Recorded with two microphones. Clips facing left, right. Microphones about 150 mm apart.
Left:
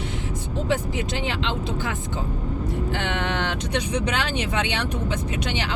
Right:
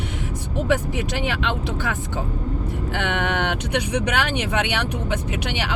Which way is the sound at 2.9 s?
60° right (ahead or behind).